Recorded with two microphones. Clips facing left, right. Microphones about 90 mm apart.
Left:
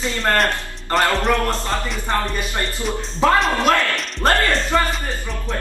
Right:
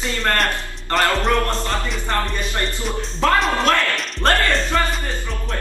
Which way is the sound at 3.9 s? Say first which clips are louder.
Left 1 dB; centre (ahead or behind).